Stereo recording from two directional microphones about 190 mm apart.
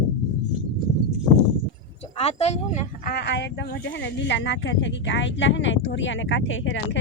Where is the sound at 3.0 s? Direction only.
55° left (ahead or behind); by 6.8 s 80° left.